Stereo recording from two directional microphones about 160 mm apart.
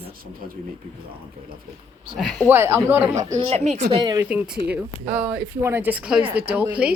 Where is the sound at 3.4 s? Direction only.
45° right (ahead or behind).